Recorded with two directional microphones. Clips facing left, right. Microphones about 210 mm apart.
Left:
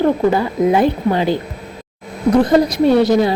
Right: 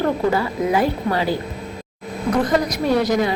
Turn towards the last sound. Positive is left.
turn(degrees=30)  # may be behind; listen again after turning